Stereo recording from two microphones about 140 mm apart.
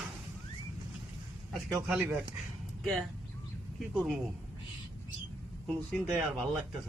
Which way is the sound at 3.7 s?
Centre (ahead or behind).